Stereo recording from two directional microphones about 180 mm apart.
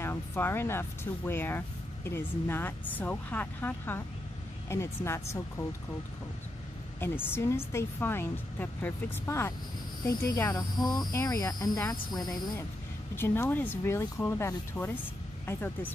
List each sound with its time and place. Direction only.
0.0 s speech: 15° left (ahead or behind)
7.0 s speech: 10° left (ahead or behind)